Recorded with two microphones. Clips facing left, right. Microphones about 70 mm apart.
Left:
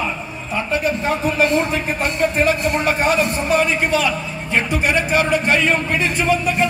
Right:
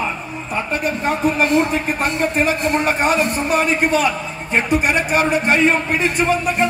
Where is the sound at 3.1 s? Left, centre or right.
Right.